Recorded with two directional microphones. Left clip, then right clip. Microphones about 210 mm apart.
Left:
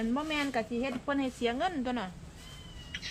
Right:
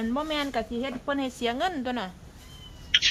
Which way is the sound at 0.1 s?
25° right (ahead or behind).